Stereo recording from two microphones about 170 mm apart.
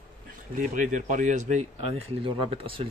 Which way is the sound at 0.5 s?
50° right (ahead or behind).